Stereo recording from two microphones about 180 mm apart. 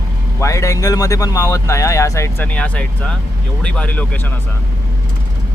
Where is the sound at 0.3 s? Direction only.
15° left (ahead or behind).